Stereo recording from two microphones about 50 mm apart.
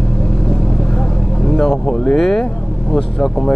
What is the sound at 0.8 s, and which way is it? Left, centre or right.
Vehicle, centre.